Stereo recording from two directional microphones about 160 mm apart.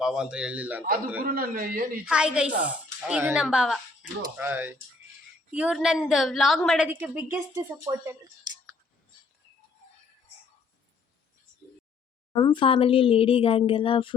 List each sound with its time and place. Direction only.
0.0 s a woman's voice: 5° right (ahead or behind)
1.2 s a man's voice: 65° right (ahead or behind)
2.0 s a woman's voice: 5° right (ahead or behind)
6.8 s a woman's voice: 10° right (ahead or behind)
12.3 s speech: 25° left (ahead or behind)